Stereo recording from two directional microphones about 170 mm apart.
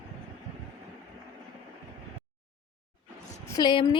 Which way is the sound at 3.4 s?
20° left (ahead or behind).